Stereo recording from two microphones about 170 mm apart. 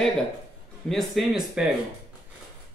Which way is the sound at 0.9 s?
Centre (ahead or behind).